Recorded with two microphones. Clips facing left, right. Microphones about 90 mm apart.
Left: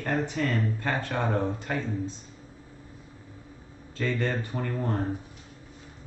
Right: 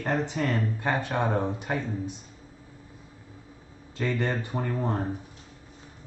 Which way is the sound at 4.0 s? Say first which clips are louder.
Even; 20° right (ahead or behind).